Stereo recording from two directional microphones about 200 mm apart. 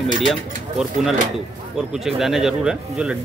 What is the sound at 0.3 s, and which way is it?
Speech, centre (ahead or behind).